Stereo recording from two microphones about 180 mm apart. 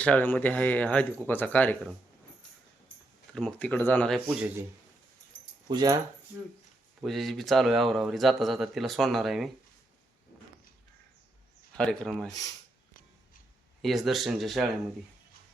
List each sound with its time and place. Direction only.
0.0 s speech: 10° left (ahead or behind)
3.3 s speech: 5° left (ahead or behind)
4.4 s speech: 10° right (ahead or behind)
5.6 s speech: 20° right (ahead or behind)
7.0 s speech: centre (ahead or behind)
11.8 s speech: centre (ahead or behind)
13.8 s speech: centre (ahead or behind)